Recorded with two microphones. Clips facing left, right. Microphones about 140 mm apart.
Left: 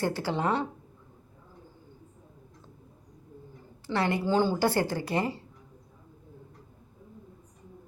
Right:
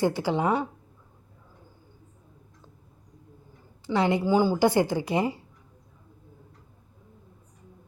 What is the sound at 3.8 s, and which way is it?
Speech, 15° right (ahead or behind).